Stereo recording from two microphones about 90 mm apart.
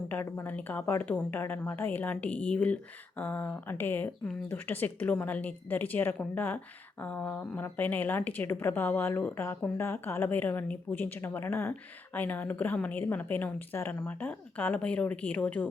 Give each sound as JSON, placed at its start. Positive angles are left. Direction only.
{"t": 0.1, "sound": "a woman's voice", "side_deg": 25}